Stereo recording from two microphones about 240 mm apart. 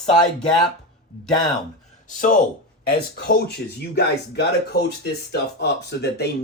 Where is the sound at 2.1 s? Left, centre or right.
Left.